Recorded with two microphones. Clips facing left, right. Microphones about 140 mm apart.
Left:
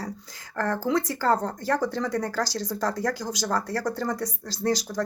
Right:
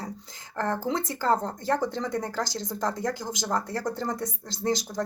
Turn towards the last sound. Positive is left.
turn(degrees=-20)  # may be behind; listen again after turning